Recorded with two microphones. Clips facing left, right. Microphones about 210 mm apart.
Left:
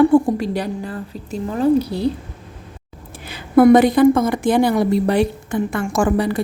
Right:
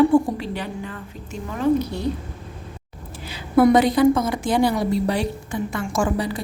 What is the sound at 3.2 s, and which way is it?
A woman's voice, 55° left (ahead or behind).